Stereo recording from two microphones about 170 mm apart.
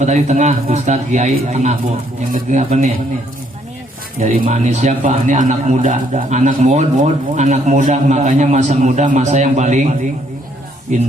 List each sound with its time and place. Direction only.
0.0 s a man's voice: 45° right (ahead or behind)
4.4 s a man's voice: 45° right (ahead or behind)
10.9 s a man's voice: 45° right (ahead or behind)